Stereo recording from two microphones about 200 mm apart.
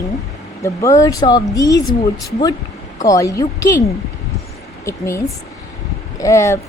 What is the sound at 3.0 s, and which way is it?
Speech, 15° left (ahead or behind).